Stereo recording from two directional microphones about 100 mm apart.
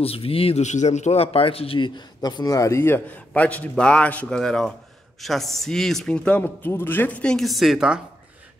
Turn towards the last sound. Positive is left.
turn(degrees=-5)  # may be behind; listen again after turning